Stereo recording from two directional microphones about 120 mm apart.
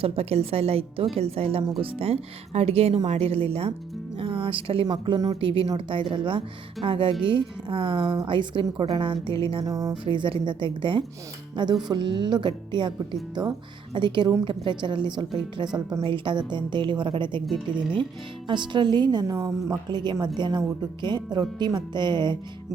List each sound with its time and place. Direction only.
0.0 s speech: 55° right (ahead or behind)
4.2 s music: 45° right (ahead or behind)
4.9 s a woman's voice: 40° right (ahead or behind)
9.6 s speech: 30° right (ahead or behind)
10.0 s a woman's voice: 45° right (ahead or behind)
13.9 s a woman's voice: 40° right (ahead or behind)
18.4 s a woman's voice: 40° right (ahead or behind)
19.9 s a woman's voice: 35° right (ahead or behind)
21.6 s a woman's voice: 40° right (ahead or behind)